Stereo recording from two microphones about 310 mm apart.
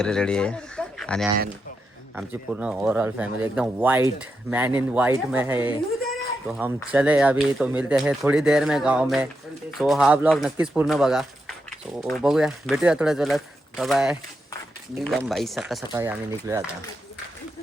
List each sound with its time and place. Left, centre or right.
0.0 s speech: centre